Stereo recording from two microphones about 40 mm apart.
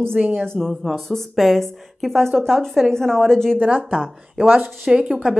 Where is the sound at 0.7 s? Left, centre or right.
Centre.